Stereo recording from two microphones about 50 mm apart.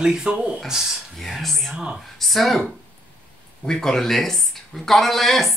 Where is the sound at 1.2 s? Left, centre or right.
Centre.